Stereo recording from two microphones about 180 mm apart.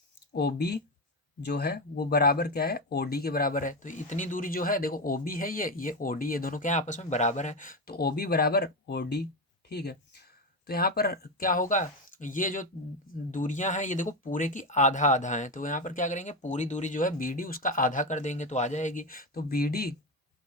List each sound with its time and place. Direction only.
0.3 s speech: 65° left (ahead or behind)